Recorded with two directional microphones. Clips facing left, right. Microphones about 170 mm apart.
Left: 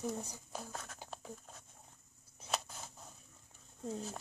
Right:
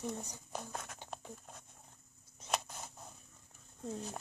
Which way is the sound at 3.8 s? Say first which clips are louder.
Left 1 dB; 5° left (ahead or behind).